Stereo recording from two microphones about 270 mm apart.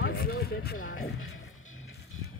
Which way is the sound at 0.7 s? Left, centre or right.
Left.